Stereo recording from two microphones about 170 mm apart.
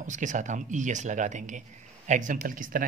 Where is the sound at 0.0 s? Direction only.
45° right (ahead or behind).